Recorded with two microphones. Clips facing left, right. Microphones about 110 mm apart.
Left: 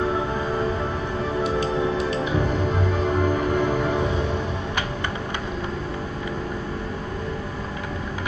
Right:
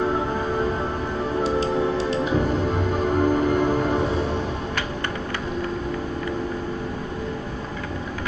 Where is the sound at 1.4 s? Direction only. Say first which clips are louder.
Right 2 dB; 25° right (ahead or behind).